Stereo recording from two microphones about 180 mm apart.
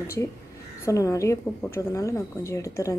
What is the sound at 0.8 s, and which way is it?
A woman's voice, 15° left (ahead or behind).